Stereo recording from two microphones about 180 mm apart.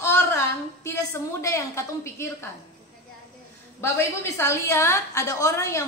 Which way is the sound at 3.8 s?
15° left (ahead or behind).